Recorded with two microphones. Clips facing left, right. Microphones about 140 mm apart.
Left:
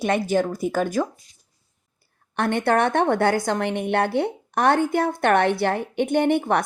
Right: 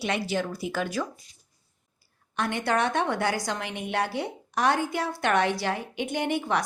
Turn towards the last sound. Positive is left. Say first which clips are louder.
# left 7 dB
turn(degrees=55)  # may be behind; listen again after turning